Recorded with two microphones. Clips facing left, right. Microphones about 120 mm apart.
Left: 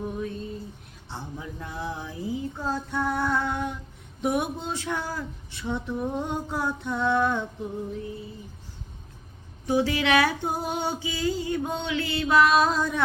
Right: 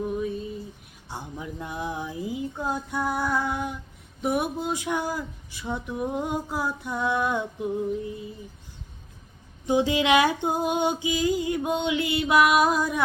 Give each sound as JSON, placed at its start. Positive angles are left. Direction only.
{"t": 0.2, "sound": "a sound", "side_deg": -10}
{"t": 4.2, "sound": "speech", "side_deg": 0}
{"t": 9.6, "sound": "female singing", "side_deg": -20}
{"t": 11.0, "sound": "speech", "side_deg": -15}